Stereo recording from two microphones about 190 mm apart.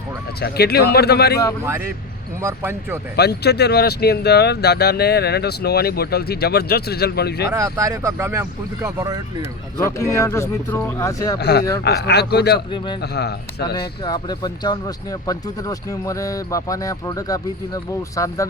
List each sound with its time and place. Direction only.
0.3 s speech: 55° left (ahead or behind)
2.4 s speech: 15° right (ahead or behind)
3.2 s speech: 60° left (ahead or behind)
7.5 s speech: 15° right (ahead or behind)
10.2 s speech: 15° left (ahead or behind)
11.3 s speech: 60° left (ahead or behind)
12.7 s speech: 25° left (ahead or behind)
13.0 s speech: 60° left (ahead or behind)
14.0 s speech: 20° left (ahead or behind)